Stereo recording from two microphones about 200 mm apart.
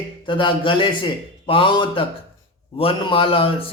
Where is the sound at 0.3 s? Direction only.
25° left (ahead or behind).